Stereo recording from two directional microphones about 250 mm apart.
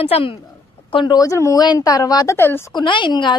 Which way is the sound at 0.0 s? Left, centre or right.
Left.